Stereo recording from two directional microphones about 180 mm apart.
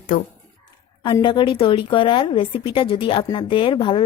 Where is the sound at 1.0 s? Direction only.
25° left (ahead or behind).